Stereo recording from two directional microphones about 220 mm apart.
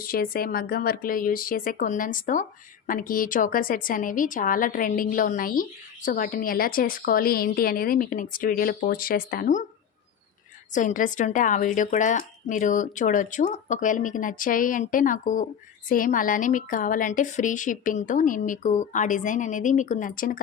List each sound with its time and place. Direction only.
0.0 s speech: 40° left (ahead or behind)
10.7 s speech: 35° left (ahead or behind)